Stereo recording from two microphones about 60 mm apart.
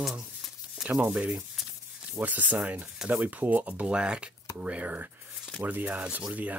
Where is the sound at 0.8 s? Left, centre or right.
Centre.